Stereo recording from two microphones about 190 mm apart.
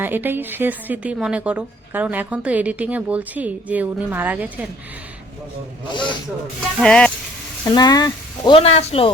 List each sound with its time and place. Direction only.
0.0 s a woman's voice: 10° right (ahead or behind)
5.9 s speech: 25° left (ahead or behind)
6.7 s speech: 5° left (ahead or behind)
7.6 s speech: 20° left (ahead or behind)